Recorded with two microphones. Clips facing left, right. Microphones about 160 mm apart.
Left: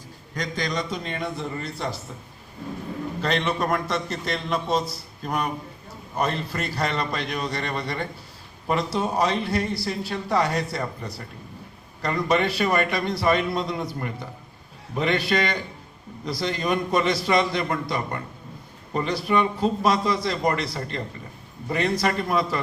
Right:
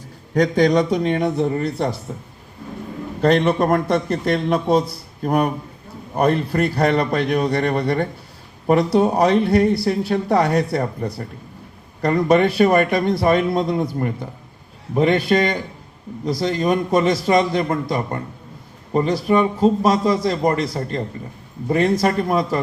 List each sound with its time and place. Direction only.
0.3 s a man's voice: 60° right (ahead or behind)
3.2 s a man's voice: 55° right (ahead or behind)
3.4 s a man's voice: 35° right (ahead or behind)
3.8 s a man's voice: 55° right (ahead or behind)
12.3 s a man's voice: 50° right (ahead or behind)